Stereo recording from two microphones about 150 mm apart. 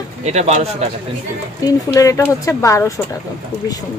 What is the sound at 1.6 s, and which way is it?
Speech, 25° left (ahead or behind).